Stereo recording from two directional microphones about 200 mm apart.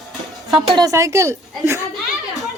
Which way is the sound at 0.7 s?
20° right (ahead or behind).